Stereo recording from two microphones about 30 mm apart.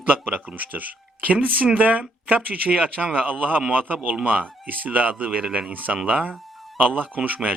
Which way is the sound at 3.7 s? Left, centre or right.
Right.